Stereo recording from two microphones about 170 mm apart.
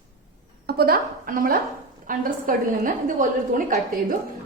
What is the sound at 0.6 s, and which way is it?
A woman's voice, 65° right (ahead or behind).